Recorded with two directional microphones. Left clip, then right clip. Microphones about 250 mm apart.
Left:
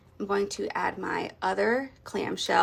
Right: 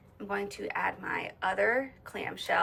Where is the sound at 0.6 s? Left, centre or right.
Centre.